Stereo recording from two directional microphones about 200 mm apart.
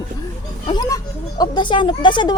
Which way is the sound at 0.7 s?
20° left (ahead or behind).